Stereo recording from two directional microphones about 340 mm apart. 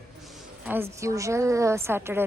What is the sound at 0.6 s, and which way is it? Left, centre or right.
A woman's voice, centre.